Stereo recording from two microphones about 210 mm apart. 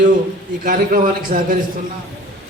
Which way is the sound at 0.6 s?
40° right (ahead or behind).